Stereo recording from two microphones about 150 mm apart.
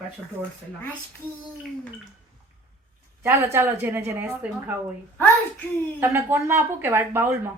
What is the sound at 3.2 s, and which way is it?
Speech, 15° right (ahead or behind).